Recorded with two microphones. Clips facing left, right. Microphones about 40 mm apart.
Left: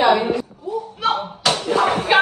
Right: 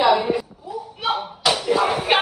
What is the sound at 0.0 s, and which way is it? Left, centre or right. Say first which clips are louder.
Speech: left 1 dB; left.